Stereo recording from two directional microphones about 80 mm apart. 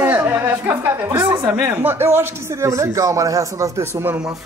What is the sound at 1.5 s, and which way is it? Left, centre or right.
Speech, right.